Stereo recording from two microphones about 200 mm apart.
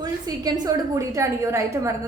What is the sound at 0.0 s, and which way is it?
A woman's voice, 20° right (ahead or behind).